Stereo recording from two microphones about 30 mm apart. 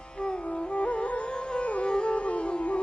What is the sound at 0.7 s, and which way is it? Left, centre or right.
Music, left.